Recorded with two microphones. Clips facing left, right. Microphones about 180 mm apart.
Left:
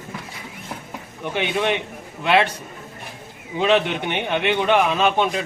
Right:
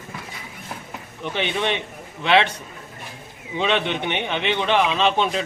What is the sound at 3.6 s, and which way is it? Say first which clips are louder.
Speech: left 3 dB; 10° left (ahead or behind).